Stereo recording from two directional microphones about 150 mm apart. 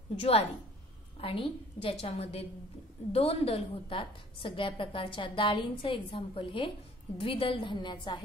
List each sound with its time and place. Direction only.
0.1 s a woman's voice: 45° left (ahead or behind)